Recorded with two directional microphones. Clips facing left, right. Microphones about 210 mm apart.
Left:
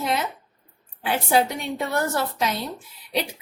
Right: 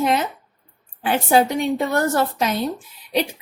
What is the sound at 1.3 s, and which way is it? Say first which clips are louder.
Speech: right 5 dB; 50° right (ahead or behind).